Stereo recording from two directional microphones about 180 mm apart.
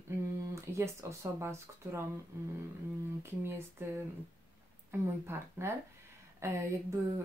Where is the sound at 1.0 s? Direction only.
15° right (ahead or behind).